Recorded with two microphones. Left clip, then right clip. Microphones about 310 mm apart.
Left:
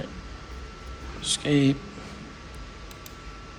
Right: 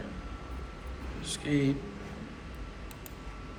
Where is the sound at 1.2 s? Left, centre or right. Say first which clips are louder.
Left 7 dB; centre.